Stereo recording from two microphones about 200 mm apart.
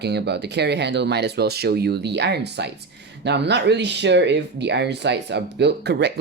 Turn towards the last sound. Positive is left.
turn(degrees=-55)  # may be behind; listen again after turning